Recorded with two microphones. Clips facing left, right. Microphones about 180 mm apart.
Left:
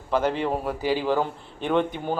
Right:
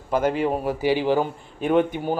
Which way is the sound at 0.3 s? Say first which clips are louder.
Right 3 dB; 5° right (ahead or behind).